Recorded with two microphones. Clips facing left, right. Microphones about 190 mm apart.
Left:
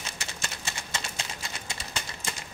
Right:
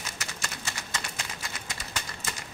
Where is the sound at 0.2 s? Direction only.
25° left (ahead or behind).